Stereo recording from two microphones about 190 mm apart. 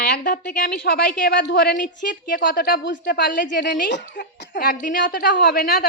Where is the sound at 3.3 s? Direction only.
45° left (ahead or behind).